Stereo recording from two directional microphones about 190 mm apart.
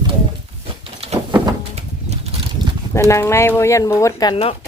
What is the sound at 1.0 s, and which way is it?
Bird, 35° right (ahead or behind).